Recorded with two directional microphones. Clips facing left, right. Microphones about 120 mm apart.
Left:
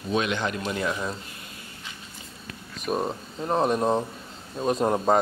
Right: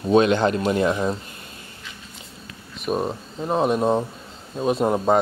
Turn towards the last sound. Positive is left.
turn(degrees=-5)  # may be behind; listen again after turning